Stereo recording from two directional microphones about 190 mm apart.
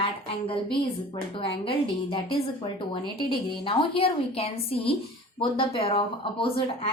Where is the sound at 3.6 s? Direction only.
30° left (ahead or behind).